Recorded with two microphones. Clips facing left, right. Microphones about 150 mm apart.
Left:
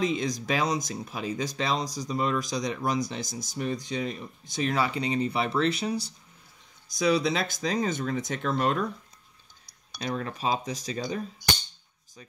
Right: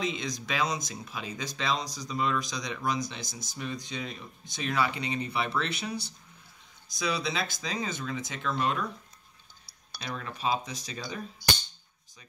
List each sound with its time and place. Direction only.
0.0 s speech: 40° left (ahead or behind)
10.0 s speech: 40° left (ahead or behind)